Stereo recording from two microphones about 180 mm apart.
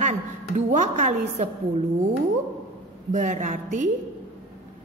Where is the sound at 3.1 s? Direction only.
45° right (ahead or behind).